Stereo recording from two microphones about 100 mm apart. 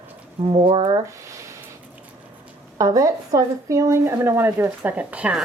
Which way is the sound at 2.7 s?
35° right (ahead or behind).